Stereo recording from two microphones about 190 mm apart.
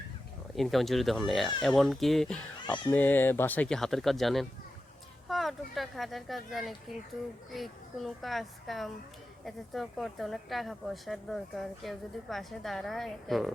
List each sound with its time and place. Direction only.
0.5 s a woman's voice: centre (ahead or behind)